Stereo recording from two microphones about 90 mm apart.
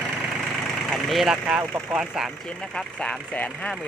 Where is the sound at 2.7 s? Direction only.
10° left (ahead or behind).